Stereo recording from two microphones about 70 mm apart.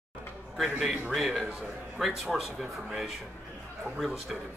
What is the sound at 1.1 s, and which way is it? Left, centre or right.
A man's voice, centre.